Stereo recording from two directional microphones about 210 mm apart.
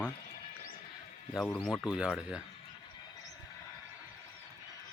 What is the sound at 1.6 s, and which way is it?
Speech, 5° left (ahead or behind).